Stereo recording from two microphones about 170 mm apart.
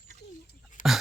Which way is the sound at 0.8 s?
50° left (ahead or behind).